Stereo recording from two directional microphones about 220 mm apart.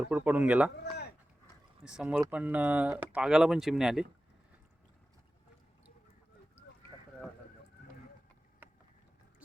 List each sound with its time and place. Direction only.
0.1 s speech: 5° right (ahead or behind)
0.7 s a sound: 45° left (ahead or behind)
1.8 s speech: 5° right (ahead or behind)
8.6 s boat: 10° right (ahead or behind)